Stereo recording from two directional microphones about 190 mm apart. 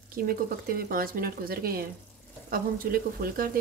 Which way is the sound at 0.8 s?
50° right (ahead or behind).